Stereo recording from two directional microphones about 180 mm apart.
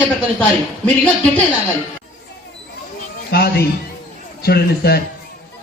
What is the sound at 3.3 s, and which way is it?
A man's voice, 60° left (ahead or behind).